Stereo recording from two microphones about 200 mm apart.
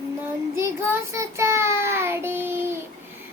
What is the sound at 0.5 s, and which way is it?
Child singing, 15° right (ahead or behind).